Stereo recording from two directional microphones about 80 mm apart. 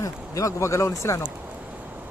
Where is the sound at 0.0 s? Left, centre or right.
Left.